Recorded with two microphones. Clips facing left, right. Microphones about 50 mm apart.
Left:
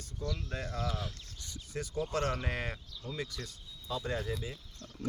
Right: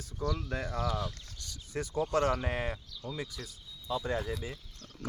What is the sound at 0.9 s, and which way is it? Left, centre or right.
Speech, centre.